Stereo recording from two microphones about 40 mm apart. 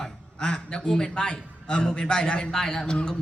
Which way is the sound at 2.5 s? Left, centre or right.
Centre.